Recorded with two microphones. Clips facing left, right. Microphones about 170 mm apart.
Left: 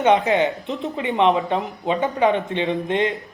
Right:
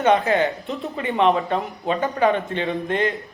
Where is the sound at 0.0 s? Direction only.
20° left (ahead or behind).